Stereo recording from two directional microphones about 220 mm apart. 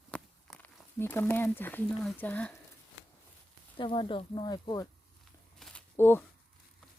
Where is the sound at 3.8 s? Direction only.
25° left (ahead or behind).